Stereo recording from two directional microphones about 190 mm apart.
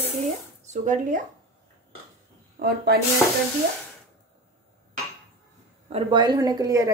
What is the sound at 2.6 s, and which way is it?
Speech, 50° right (ahead or behind).